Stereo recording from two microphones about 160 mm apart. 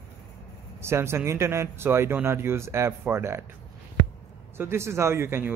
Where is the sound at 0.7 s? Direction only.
15° right (ahead or behind).